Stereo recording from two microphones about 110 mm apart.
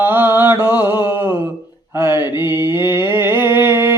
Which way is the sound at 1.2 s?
40° left (ahead or behind).